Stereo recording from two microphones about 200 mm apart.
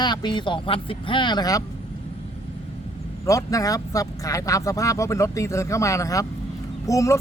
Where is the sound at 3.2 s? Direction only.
15° left (ahead or behind).